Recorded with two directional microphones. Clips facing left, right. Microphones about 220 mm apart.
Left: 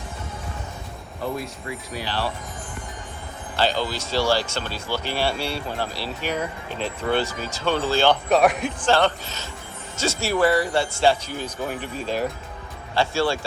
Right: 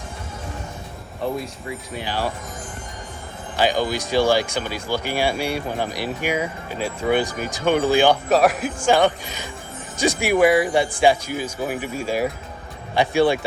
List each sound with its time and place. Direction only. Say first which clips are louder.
2.0 s speech: right 2 dB; 15° right (ahead or behind)
3.6 s speech: right 3 dB; 15° right (ahead or behind)
8.3 s speech: right 1 dB; centre (ahead or behind); by 13.4 s 15° right (ahead or behind)